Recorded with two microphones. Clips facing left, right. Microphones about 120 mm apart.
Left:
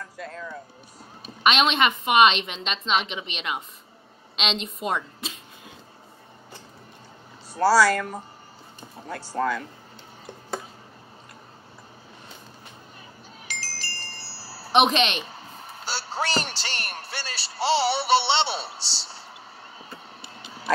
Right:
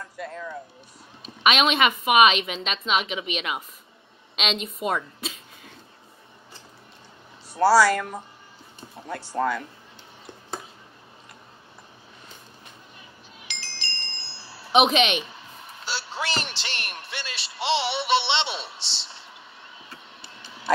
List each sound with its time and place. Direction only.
0.2 s speech: 20° right (ahead or behind)
1.2 s a woman's voice: 5° right (ahead or behind)
7.5 s speech: 25° right (ahead or behind)
9.3 s speech: 25° right (ahead or behind)
13.5 s wind chime: 40° left (ahead or behind)
14.7 s a woman's voice: 5° right (ahead or behind)
15.1 s a man's voice: 40° left (ahead or behind)
19.9 s a sound: 40° left (ahead or behind)